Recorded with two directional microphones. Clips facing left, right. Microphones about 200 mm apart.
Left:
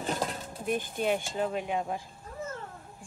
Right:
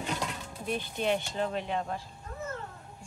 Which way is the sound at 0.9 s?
5° left (ahead or behind).